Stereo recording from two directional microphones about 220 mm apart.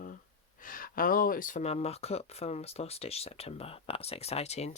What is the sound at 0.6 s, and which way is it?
Speech, 40° left (ahead or behind).